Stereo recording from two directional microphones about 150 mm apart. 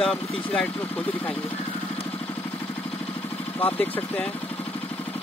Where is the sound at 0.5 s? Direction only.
10° left (ahead or behind).